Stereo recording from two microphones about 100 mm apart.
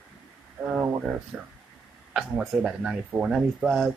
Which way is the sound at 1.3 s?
5° right (ahead or behind).